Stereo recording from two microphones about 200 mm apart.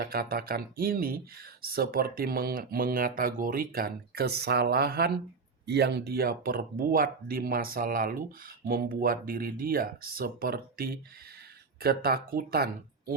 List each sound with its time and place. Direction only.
0.0 s speech: 50° right (ahead or behind)